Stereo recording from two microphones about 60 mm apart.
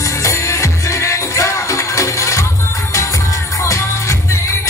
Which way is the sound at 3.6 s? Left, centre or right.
Left.